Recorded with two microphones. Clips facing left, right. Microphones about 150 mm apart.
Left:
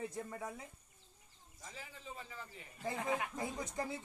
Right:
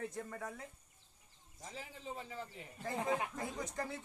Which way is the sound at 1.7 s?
65° right (ahead or behind).